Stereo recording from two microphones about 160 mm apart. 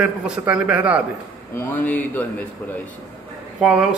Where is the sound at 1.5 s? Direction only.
10° left (ahead or behind).